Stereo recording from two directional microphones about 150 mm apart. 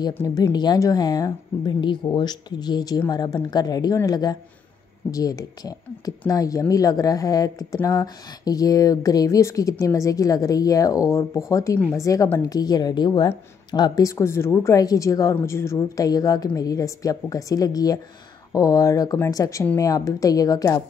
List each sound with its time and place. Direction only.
0.1 s speech: 20° left (ahead or behind)